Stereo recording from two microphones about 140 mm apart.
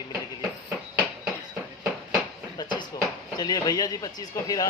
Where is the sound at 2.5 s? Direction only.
35° left (ahead or behind).